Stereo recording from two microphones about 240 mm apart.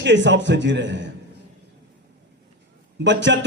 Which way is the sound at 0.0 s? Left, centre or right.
Right.